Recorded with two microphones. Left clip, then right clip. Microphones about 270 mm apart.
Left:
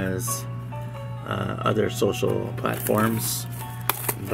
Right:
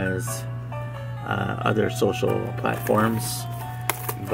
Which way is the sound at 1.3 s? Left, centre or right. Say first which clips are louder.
Right 1 dB; centre.